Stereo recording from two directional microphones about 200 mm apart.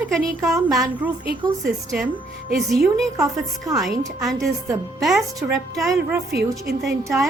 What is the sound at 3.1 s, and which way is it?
Speech, 15° right (ahead or behind).